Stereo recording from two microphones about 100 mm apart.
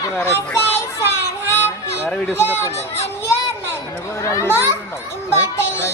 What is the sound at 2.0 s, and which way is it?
Speech, 5° left (ahead or behind).